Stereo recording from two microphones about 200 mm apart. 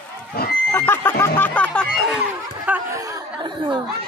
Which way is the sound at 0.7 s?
10° left (ahead or behind).